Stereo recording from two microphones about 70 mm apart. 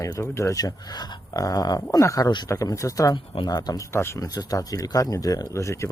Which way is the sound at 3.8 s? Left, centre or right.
Left.